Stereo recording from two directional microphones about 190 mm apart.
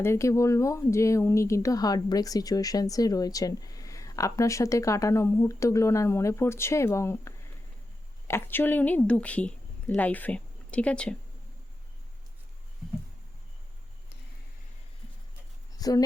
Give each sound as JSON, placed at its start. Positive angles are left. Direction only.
{"t": 0.0, "sound": "speech", "side_deg": 15}
{"t": 15.8, "sound": "a woman's voice", "side_deg": 20}